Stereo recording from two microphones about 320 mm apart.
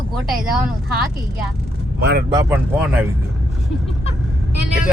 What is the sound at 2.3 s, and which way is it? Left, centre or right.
Speech, centre.